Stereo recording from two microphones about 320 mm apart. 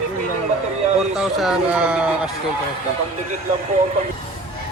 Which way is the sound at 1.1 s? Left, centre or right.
Centre.